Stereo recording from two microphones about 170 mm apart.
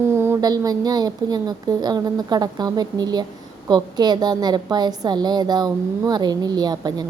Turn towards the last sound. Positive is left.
turn(degrees=-25)  # may be behind; listen again after turning